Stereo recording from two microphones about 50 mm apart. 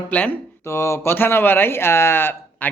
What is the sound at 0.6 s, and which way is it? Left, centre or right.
Speech, left.